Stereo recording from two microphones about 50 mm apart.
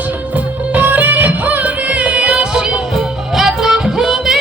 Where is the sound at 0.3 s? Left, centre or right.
Right.